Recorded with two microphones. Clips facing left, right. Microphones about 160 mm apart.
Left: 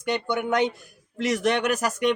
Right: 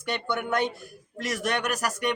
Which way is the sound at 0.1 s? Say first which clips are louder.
Left 4 dB; 15° left (ahead or behind).